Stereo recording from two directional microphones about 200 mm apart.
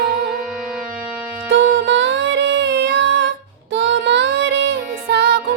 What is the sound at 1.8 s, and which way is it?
Music, 65° right (ahead or behind).